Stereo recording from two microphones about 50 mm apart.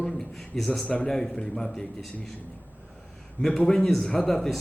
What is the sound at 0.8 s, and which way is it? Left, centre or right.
Speech, left.